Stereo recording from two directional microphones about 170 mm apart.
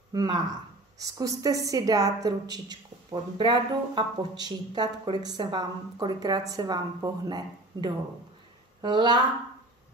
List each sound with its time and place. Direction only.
0.1 s speech: 25° right (ahead or behind)